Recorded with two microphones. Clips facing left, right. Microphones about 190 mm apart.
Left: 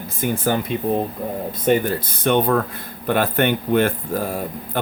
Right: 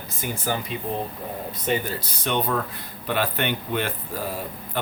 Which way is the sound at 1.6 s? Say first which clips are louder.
Left 8 dB; 50° left (ahead or behind).